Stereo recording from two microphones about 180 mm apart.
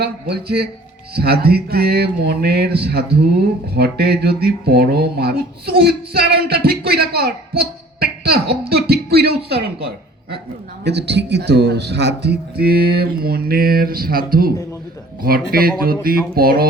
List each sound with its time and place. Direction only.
0.0 s speech: 60° right (ahead or behind)